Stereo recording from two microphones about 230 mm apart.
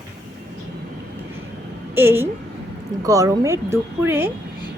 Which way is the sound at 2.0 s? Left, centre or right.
Centre.